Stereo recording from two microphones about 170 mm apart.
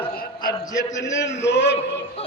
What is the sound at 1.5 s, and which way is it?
Speech, 90° left.